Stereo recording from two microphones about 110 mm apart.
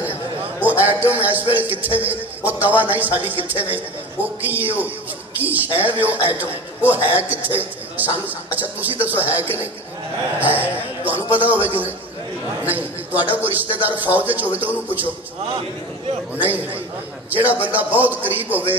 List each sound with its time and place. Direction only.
0.0 s a sound: 15° right (ahead or behind)
2.0 s a man's voice: 15° right (ahead or behind)
16.3 s a man's voice: 15° right (ahead or behind)